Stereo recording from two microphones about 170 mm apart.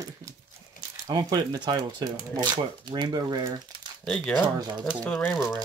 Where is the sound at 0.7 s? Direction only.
25° right (ahead or behind).